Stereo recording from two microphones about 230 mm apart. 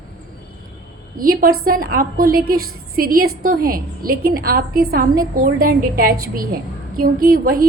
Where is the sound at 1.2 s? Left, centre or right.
Right.